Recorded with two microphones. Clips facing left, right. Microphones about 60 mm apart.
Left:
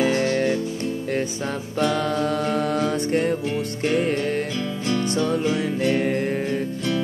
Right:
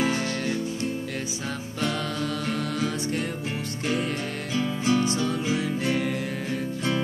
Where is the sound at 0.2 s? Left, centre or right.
Left.